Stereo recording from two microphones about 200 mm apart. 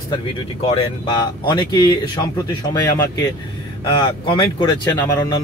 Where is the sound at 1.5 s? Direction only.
20° left (ahead or behind).